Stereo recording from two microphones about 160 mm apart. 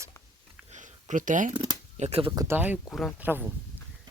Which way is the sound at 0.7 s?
50° right (ahead or behind).